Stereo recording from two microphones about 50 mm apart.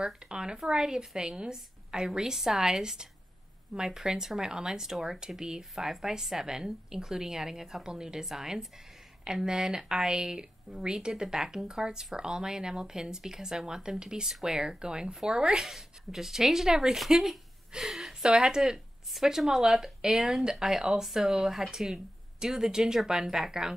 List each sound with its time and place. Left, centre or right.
0.0 s speech: centre
15.6 s speech: centre
17.1 s a sound: centre
18.2 s speech: centre